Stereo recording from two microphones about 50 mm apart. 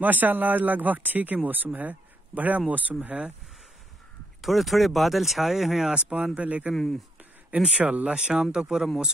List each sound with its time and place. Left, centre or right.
0.0 s speech: right
4.4 s speech: centre
5.9 s speech: right
6.7 s speech: centre
7.5 s speech: right